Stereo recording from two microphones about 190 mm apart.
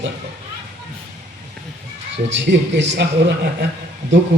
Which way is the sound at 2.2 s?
65° right (ahead or behind).